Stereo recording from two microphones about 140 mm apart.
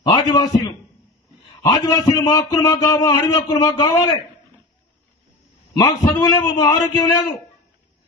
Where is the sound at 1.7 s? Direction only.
25° left (ahead or behind).